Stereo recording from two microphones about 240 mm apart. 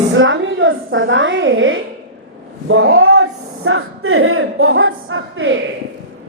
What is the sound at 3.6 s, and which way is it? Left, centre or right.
Speech, right.